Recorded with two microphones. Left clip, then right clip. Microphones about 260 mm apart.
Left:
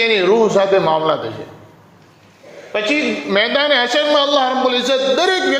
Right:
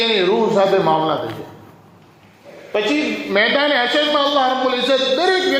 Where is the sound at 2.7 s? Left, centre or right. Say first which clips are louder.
Left 1 dB; left.